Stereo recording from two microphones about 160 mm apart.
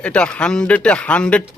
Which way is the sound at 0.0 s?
5° left (ahead or behind).